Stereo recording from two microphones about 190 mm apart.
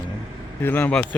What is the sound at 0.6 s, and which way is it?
Speech, 10° left (ahead or behind).